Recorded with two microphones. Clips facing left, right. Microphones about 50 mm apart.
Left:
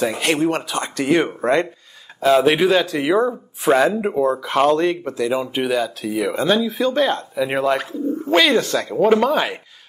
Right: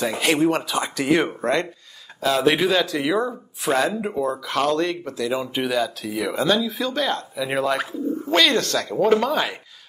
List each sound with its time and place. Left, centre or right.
0.0 s speech: centre
1.4 s speech: centre